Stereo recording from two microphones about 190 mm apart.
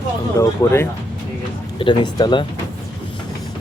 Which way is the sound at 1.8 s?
25° left (ahead or behind).